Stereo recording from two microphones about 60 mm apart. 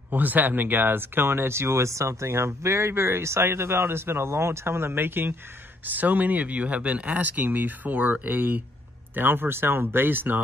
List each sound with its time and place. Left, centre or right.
0.1 s speech: right